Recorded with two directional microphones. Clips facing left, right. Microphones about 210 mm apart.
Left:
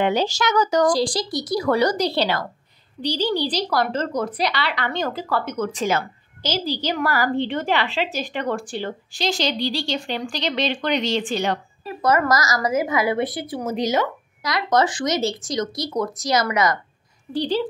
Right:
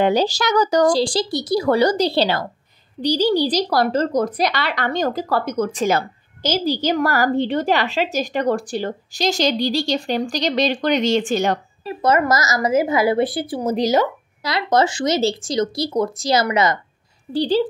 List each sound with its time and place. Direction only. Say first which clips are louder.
0.0 s a woman's voice: right 3 dB; 35° right (ahead or behind)
3.0 s a woman's voice: right 5 dB; 40° right (ahead or behind)
11.8 s a woman's voice: right 2 dB; 25° right (ahead or behind)